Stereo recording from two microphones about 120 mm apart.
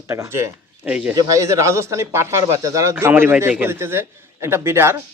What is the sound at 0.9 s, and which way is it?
Speech, 10° right (ahead or behind).